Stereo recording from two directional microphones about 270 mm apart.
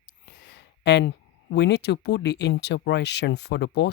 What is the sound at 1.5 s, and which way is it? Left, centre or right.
Speech, left.